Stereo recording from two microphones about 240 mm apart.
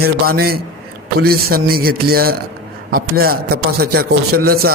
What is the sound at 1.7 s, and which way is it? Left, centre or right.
A man's voice, right.